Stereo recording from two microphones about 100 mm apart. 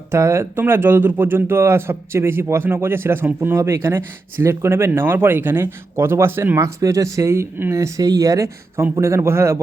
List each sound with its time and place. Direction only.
0.1 s speech: 25° right (ahead or behind)